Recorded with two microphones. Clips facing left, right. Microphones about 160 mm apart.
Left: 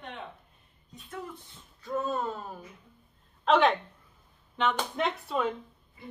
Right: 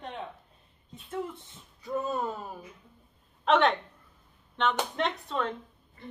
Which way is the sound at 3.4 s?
Centre (ahead or behind).